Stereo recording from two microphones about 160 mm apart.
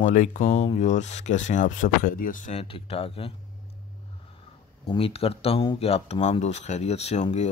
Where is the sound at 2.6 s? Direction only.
35° left (ahead or behind).